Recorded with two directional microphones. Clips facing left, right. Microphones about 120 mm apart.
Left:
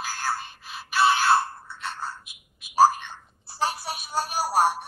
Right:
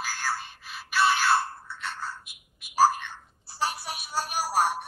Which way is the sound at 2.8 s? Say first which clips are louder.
Left 3 dB; 25° left (ahead or behind).